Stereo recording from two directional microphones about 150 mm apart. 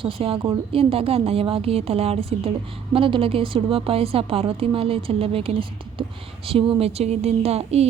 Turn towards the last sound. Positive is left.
turn(degrees=-45)  # may be behind; listen again after turning